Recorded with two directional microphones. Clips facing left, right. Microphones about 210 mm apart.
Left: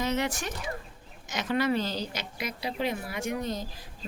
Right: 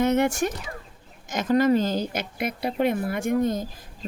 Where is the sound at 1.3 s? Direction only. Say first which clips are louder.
Right 7 dB; 45° right (ahead or behind).